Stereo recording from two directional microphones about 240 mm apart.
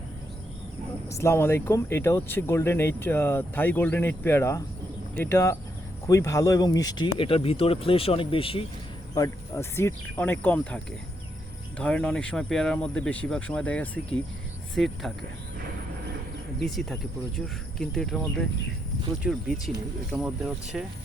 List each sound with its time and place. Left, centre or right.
1.0 s speech: centre
11.8 s speech: centre
16.6 s speech: centre